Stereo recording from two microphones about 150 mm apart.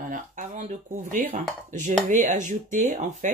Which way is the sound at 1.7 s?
55° right (ahead or behind).